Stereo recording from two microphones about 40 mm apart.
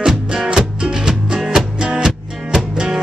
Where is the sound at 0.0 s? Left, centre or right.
Centre.